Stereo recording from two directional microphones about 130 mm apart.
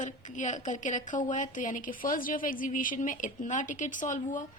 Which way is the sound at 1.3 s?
80° left.